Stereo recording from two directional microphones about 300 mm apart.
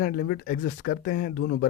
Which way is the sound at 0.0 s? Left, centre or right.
Left.